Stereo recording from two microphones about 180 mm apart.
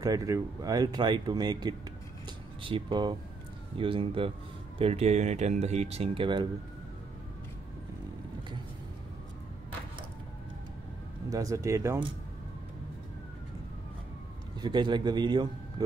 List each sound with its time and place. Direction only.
0.0 s speech: 20° right (ahead or behind)
11.2 s speech: 20° right (ahead or behind)
14.6 s speech: 25° right (ahead or behind)